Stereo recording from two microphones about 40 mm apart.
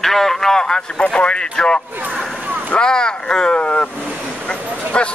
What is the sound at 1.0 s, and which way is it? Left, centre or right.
Speech, left.